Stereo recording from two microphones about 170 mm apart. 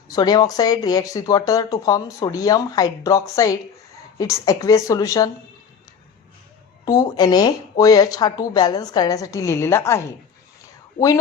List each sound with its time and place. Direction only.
0.1 s speech: 25° left (ahead or behind)
6.8 s speech: 20° left (ahead or behind)